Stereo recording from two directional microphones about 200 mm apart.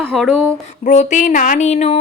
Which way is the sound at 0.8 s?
35° left (ahead or behind).